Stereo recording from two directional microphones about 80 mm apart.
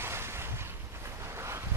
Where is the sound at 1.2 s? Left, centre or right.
Right.